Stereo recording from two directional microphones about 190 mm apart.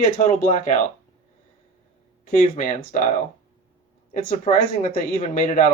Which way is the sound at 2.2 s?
40° left (ahead or behind).